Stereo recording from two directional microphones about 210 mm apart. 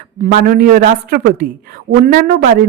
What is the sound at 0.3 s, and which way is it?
A woman's voice, 45° right (ahead or behind).